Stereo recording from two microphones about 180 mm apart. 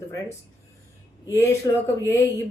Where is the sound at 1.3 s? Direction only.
15° left (ahead or behind).